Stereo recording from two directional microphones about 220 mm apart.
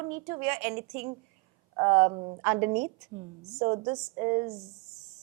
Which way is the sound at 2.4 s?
10° right (ahead or behind).